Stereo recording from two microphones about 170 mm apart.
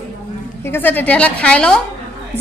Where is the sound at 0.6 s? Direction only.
10° left (ahead or behind).